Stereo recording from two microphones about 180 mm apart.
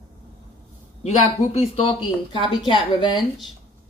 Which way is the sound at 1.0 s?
35° left (ahead or behind).